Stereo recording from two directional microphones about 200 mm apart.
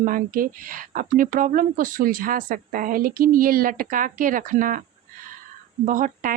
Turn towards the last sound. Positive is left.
turn(degrees=-40)  # may be behind; listen again after turning